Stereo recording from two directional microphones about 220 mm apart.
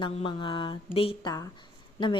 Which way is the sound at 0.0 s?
25° left (ahead or behind).